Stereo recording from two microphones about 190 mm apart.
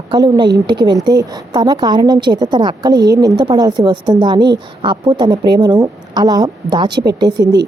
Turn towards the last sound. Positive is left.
turn(degrees=-20)  # may be behind; listen again after turning